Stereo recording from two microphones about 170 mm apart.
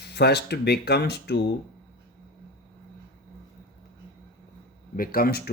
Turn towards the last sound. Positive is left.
turn(degrees=60)  # may be behind; listen again after turning